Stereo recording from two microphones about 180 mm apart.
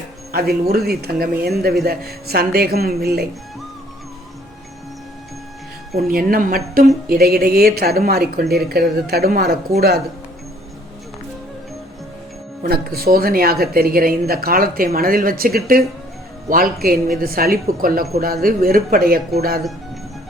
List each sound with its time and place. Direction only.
0.3 s speech: 60° right (ahead or behind)
6.1 s speech: 50° right (ahead or behind)
12.6 s speech: 60° right (ahead or behind)